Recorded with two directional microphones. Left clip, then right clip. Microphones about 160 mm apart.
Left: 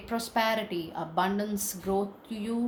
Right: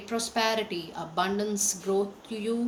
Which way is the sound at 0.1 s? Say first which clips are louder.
Right 1 dB; 45° left (ahead or behind).